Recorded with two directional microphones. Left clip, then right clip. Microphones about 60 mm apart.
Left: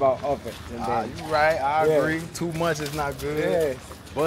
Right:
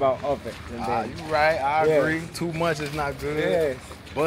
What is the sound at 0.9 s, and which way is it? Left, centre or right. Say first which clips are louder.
Speech: even; centre.